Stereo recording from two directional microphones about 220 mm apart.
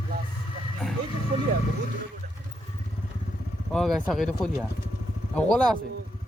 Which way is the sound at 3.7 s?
Centre (ahead or behind).